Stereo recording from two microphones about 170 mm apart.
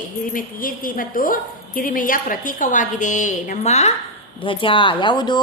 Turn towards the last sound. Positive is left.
turn(degrees=25)  # may be behind; listen again after turning